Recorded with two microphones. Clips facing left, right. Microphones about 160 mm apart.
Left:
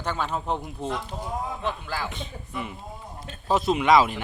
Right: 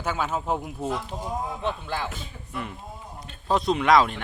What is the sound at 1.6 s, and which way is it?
Speech, 25° right (ahead or behind).